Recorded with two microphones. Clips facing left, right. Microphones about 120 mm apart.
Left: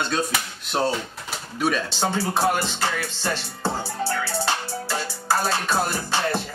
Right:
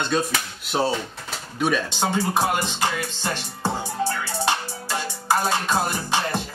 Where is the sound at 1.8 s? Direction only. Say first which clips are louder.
Right 1 dB; 15° right (ahead or behind).